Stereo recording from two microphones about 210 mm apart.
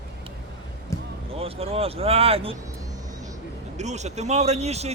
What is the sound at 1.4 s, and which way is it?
Speech, 30° right (ahead or behind).